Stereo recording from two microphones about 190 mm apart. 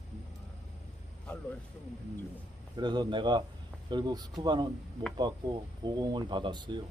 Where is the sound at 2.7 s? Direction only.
25° right (ahead or behind).